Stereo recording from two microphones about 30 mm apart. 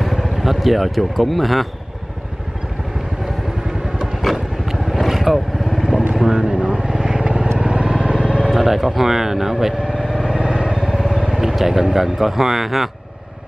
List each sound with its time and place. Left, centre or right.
0.0 s speech: centre
4.6 s vehicle: centre
5.8 s vehicle: centre
6.2 s vehicle: right
7.5 s vehicle: right
8.5 s speech: centre
9.8 s vehicle: right
10.9 s vehicle: centre
11.5 s speech: centre